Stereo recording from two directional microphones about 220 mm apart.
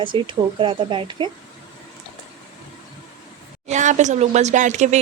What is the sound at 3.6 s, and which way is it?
Speech, 35° right (ahead or behind).